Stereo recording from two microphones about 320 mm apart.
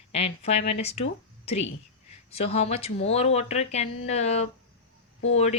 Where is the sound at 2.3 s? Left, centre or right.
Centre.